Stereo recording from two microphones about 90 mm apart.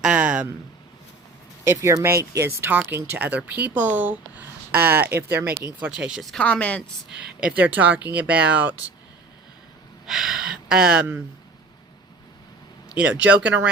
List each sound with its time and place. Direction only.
0.0 s a sound: 10° right (ahead or behind)
1.6 s speech: 30° right (ahead or behind)
6.0 s speech: 5° right (ahead or behind)
6.3 s speech: 15° left (ahead or behind)
7.1 s speech: 10° right (ahead or behind)
10.1 s speech: 5° right (ahead or behind)
13.0 s speech: 15° right (ahead or behind)